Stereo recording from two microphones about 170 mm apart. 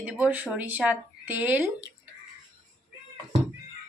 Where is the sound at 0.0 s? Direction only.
10° right (ahead or behind).